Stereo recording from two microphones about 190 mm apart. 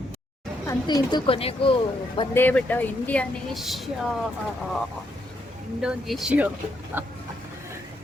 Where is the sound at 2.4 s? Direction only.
10° left (ahead or behind).